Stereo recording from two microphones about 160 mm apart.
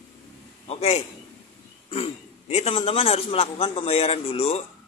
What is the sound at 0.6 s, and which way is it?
A man's voice, 40° left (ahead or behind).